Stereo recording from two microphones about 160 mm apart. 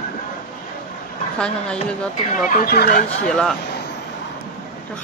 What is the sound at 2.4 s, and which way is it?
Speech, 65° left (ahead or behind).